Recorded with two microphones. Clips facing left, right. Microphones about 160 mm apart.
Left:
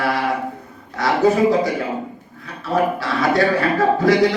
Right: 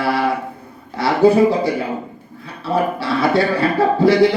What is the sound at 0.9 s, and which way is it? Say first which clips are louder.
Speech: right 3 dB; 30° right (ahead or behind).